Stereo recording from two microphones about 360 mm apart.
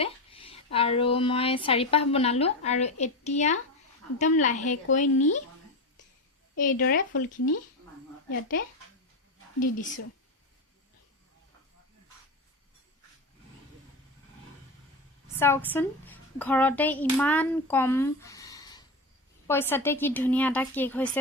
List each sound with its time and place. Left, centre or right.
0.0 s a woman's voice: centre
6.6 s a woman's voice: left
8.3 s a woman's voice: left
9.6 s speech: left
15.4 s a woman's voice: centre